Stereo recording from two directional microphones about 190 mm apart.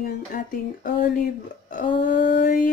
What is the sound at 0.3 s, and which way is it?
Speech, 45° left (ahead or behind).